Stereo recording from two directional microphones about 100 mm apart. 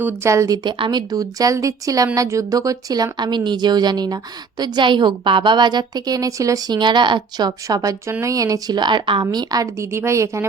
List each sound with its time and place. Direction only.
0.0 s a woman's voice: 25° right (ahead or behind)
6.7 s a woman's voice: 50° right (ahead or behind)
9.3 s speech: 40° right (ahead or behind)
9.9 s a woman's voice: 25° right (ahead or behind)